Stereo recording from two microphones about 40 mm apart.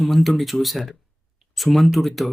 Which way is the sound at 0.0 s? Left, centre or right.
Centre.